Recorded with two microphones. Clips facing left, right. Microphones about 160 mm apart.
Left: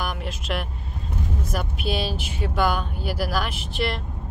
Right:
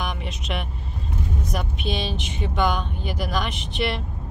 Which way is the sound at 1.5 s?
5° left (ahead or behind).